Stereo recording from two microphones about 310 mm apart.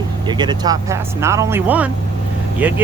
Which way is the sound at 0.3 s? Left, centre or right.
Centre.